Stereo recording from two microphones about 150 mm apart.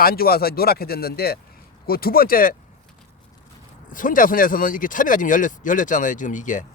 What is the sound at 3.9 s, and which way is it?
Speech, 65° left (ahead or behind).